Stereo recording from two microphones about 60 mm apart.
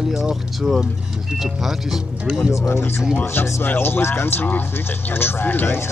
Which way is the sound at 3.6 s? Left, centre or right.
Left.